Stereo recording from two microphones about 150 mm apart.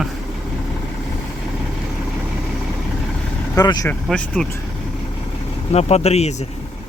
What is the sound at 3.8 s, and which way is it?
Speech, 5° left (ahead or behind).